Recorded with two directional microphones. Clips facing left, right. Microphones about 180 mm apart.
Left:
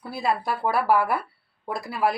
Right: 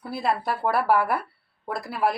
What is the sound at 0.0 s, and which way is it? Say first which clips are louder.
A woman's voice: even; centre (ahead or behind).